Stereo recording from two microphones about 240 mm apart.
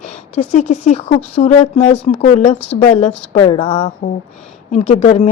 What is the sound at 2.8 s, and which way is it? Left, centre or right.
Speech, left.